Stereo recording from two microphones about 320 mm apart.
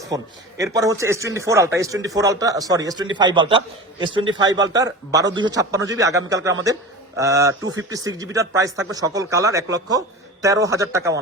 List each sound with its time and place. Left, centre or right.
0.1 s speech: centre